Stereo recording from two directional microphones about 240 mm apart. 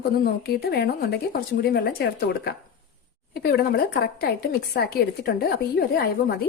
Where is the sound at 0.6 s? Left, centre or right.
Left.